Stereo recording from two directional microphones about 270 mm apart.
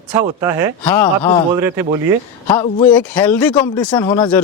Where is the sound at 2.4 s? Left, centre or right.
Centre.